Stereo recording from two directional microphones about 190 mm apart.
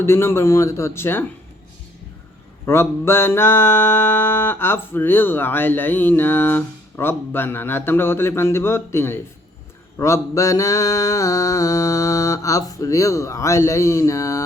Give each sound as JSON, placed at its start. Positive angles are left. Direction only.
{"t": 0.0, "sound": "music", "side_deg": 15}
{"t": 2.6, "sound": "music", "side_deg": 10}